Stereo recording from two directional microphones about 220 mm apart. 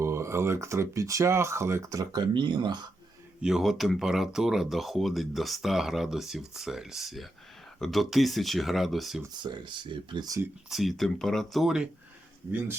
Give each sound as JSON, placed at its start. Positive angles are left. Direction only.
{"t": 0.0, "sound": "speech", "side_deg": -10}
{"t": 3.4, "sound": "speech", "side_deg": 0}
{"t": 9.2, "sound": "speech", "side_deg": -20}
{"t": 10.7, "sound": "speech", "side_deg": 0}